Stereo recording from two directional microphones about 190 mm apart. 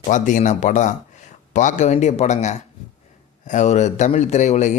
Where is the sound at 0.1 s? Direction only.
40° left (ahead or behind).